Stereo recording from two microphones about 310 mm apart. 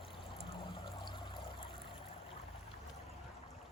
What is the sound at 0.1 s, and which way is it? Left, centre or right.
Pour, centre.